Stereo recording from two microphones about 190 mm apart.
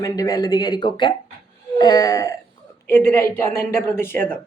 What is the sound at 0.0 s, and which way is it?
Speech, 20° left (ahead or behind).